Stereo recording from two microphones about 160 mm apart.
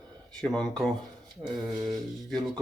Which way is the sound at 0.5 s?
5° left (ahead or behind).